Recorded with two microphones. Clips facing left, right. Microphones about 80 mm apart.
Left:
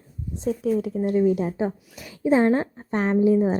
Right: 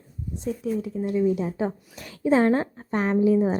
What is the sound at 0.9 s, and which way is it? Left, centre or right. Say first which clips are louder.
Speech: left 1 dB; left.